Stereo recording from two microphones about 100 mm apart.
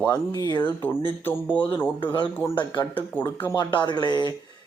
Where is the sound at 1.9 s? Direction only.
55° left (ahead or behind).